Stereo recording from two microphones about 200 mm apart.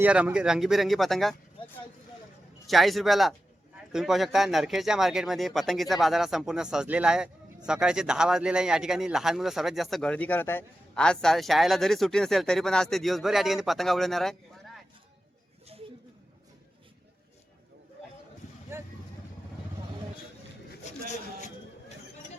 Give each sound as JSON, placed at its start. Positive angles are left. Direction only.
{"t": 0.0, "sound": "speech", "side_deg": -5}
{"t": 2.6, "sound": "speech", "side_deg": 0}
{"t": 21.1, "sound": "a sound", "side_deg": 35}